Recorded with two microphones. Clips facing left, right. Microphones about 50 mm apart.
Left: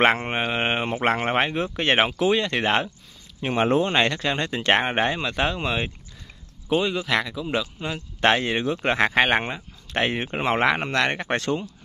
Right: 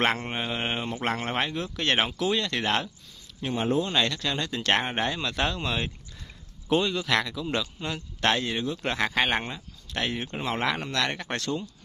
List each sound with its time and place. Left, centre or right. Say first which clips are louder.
0.0 s speech: left 6 dB; left
3.5 s speech: left 5 dB; left
3.8 s speech: left 5 dB; left; by 8.0 s centre
8.2 s speech: left 5 dB; left